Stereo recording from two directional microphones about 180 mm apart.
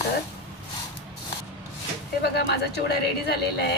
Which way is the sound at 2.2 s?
65° left (ahead or behind).